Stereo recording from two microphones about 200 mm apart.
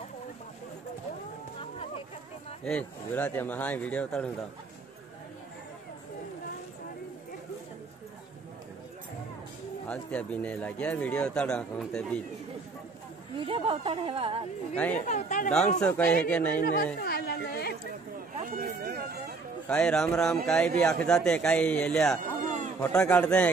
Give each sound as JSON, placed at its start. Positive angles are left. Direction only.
{"t": 1.6, "sound": "a sound", "side_deg": 30}
{"t": 2.6, "sound": "speech", "side_deg": 5}
{"t": 9.8, "sound": "speech", "side_deg": 5}
{"t": 13.4, "sound": "speech", "side_deg": -25}
{"t": 14.8, "sound": "speech", "side_deg": 5}
{"t": 15.0, "sound": "speech", "side_deg": 35}
{"t": 15.8, "sound": "speech", "side_deg": 5}
{"t": 16.5, "sound": "a sound", "side_deg": 45}
{"t": 18.4, "sound": "a sound", "side_deg": -50}
{"t": 19.7, "sound": "speech", "side_deg": 5}